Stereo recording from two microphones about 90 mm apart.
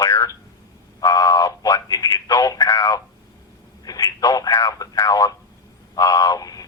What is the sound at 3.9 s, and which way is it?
Radio, 45° left (ahead or behind).